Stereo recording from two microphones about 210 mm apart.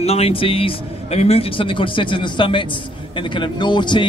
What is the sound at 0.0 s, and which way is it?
Speech, 30° left (ahead or behind).